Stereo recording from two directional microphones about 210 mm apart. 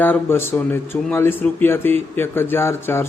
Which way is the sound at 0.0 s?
10° left (ahead or behind).